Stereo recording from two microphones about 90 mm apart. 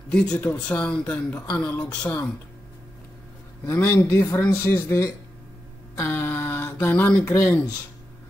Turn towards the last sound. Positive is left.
turn(degrees=35)  # may be behind; listen again after turning